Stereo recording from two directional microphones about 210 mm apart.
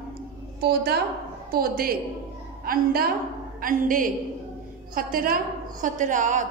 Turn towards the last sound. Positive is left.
turn(degrees=-35)  # may be behind; listen again after turning